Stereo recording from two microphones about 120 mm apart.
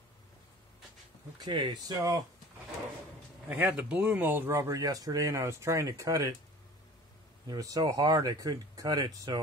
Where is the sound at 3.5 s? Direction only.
10° right (ahead or behind); by 6.3 s 25° right (ahead or behind).